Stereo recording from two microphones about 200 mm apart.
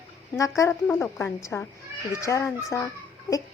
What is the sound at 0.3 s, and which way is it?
A woman's voice, 15° left (ahead or behind).